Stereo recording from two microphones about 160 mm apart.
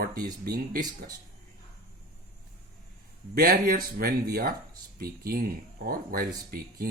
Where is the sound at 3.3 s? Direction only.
65° right (ahead or behind).